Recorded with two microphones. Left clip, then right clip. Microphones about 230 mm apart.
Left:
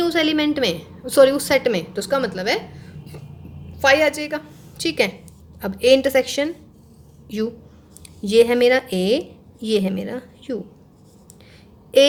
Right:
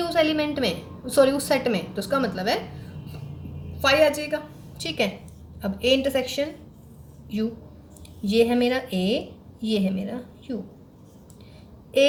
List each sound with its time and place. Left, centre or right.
0.0 s a woman's voice: left
3.8 s a woman's voice: left
8.2 s a woman's voice: left